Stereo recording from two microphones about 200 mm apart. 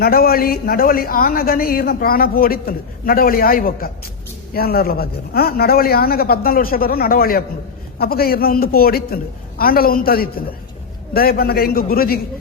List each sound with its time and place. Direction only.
0.0 s speech: 50° left (ahead or behind)